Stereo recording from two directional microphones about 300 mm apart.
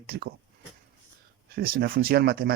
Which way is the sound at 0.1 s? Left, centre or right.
Right.